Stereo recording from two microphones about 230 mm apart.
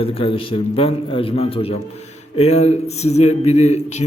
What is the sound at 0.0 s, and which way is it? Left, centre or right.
A man's voice, left.